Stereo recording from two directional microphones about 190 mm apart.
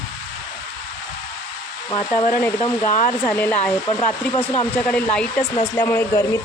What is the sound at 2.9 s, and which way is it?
Speech, 45° left (ahead or behind).